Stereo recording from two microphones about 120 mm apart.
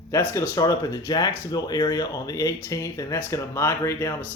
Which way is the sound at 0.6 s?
30° left (ahead or behind).